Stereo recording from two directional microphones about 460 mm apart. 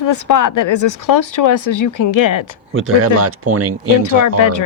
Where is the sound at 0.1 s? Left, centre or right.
Left.